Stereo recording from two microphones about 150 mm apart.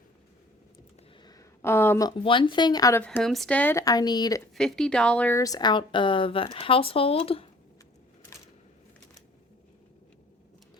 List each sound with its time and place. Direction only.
1.2 s a sound: 25° left (ahead or behind)
2.0 s speech: 35° left (ahead or behind)
3.0 s speech: 10° left (ahead or behind); by 4.4 s 25° left (ahead or behind)
4.5 s speech: 5° left (ahead or behind)
5.4 s speech: 25° left (ahead or behind)